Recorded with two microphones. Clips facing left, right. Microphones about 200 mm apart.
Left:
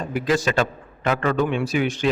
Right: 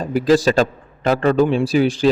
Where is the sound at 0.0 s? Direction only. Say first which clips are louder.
Right 7 dB; 35° right (ahead or behind).